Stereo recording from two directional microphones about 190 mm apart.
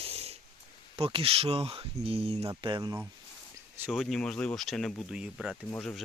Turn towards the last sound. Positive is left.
turn(degrees=5)  # may be behind; listen again after turning